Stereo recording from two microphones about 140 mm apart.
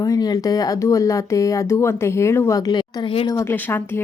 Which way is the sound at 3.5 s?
15° left (ahead or behind).